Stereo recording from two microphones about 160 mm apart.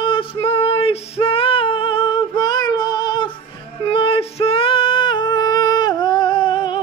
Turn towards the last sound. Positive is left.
turn(degrees=30)  # may be behind; listen again after turning